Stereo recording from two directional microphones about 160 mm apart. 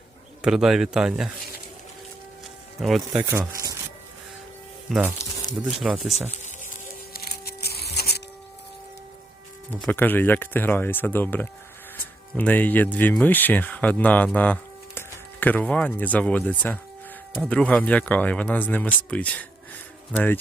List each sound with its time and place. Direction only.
0.4 s speech: 5° right (ahead or behind)
2.8 s speech: centre (ahead or behind)
3.2 s a sound: 15° right (ahead or behind)
4.9 s speech: 5° right (ahead or behind)
7.1 s music: 75° left (ahead or behind)
9.8 s speech: 10° left (ahead or behind)